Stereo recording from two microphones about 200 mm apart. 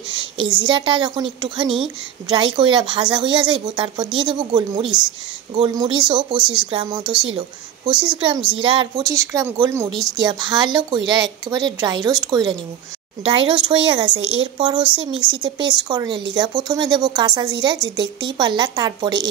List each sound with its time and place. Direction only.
0.4 s a woman's voice: 20° right (ahead or behind)
14.1 s speech: 65° right (ahead or behind)
14.4 s speech: 25° right (ahead or behind)